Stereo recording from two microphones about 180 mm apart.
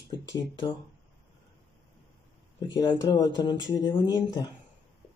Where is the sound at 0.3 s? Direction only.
25° left (ahead or behind).